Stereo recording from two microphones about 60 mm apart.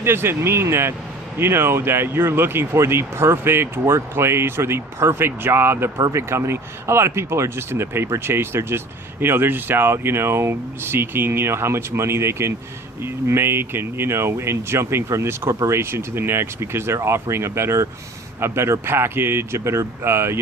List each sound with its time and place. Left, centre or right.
0.0 s speech: right
6.1 s speech: right